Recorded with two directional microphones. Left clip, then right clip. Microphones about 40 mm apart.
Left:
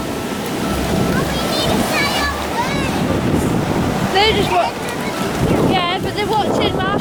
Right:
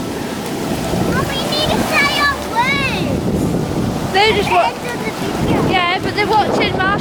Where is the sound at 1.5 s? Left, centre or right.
Right.